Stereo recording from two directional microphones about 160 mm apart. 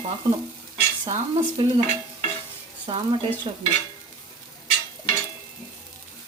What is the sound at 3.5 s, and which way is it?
Stir, 35° right (ahead or behind).